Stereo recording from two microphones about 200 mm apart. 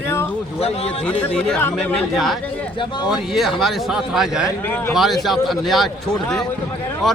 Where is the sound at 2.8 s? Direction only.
20° left (ahead or behind).